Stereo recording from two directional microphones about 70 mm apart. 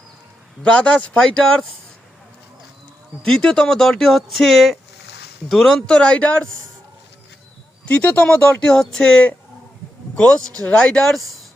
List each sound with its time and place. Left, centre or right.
0.6 s speech: centre
3.2 s speech: centre
5.8 s speech: centre
7.9 s speech: left